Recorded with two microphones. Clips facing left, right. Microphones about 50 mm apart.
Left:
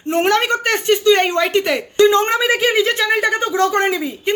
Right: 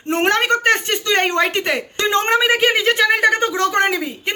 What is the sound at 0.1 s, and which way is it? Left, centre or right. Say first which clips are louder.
Speech: left 1 dB; right.